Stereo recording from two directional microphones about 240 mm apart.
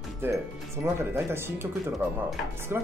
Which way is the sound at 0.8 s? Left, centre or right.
Centre.